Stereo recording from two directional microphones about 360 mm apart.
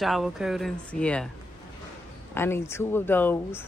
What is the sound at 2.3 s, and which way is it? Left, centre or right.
Speech, centre.